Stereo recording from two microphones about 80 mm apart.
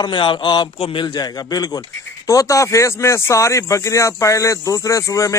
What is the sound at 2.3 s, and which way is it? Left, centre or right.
A man's voice, left.